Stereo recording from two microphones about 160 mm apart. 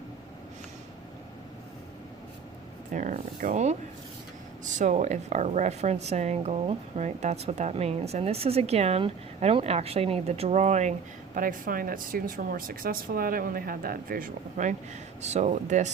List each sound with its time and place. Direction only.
2.9 s a woman's voice: 55° right (ahead or behind)
11.3 s speech: 60° right (ahead or behind)